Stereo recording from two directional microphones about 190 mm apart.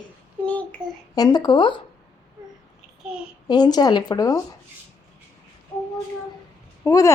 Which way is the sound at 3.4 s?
20° left (ahead or behind).